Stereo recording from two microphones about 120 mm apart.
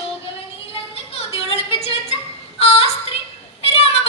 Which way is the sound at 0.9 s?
55° left (ahead or behind).